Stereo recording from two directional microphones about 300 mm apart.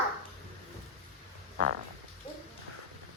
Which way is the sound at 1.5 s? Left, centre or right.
Right.